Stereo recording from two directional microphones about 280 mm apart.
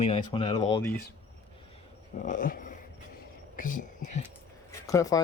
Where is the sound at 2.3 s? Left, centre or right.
Left.